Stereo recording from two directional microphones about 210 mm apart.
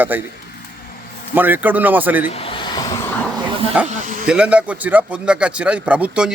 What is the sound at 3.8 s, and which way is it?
Speech, 5° right (ahead or behind).